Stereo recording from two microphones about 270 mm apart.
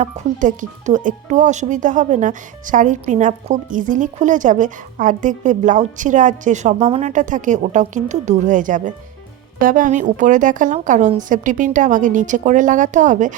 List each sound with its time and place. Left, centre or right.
0.0 s speech: right